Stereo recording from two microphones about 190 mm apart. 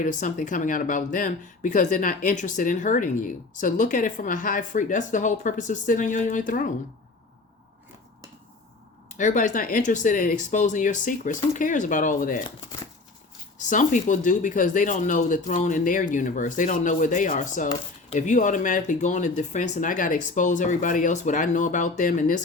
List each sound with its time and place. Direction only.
0.0 s speech: 40° left (ahead or behind)
9.1 s speech: 40° left (ahead or behind)
13.7 s speech: 40° left (ahead or behind)